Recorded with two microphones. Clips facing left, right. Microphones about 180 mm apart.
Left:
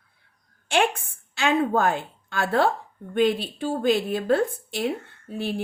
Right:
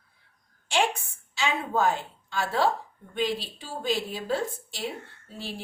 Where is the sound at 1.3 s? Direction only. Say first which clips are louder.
Left 7 dB; 55° left (ahead or behind).